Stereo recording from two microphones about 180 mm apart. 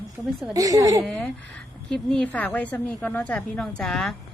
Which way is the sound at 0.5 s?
20° right (ahead or behind).